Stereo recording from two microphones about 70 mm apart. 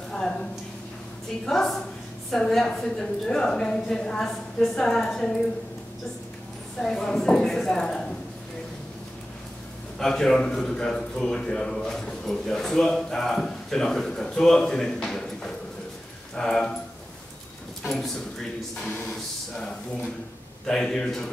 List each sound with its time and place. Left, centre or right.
1.4 s a man's voice: centre
6.8 s a man's voice: centre
9.9 s a man's voice: centre
17.8 s speech: centre
20.6 s a man's voice: centre